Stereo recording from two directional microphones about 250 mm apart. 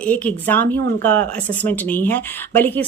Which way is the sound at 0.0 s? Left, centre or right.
Centre.